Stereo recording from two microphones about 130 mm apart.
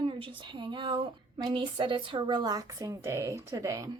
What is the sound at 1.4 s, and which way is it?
A woman's voice, 35° right (ahead or behind).